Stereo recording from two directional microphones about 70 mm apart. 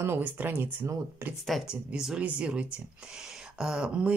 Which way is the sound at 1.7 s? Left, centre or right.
Centre.